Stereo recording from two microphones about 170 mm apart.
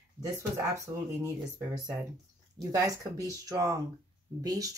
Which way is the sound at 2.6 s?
20° right (ahead or behind).